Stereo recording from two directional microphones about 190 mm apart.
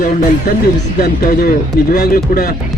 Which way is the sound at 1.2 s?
45° left (ahead or behind).